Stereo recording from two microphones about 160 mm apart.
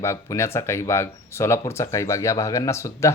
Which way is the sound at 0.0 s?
15° left (ahead or behind).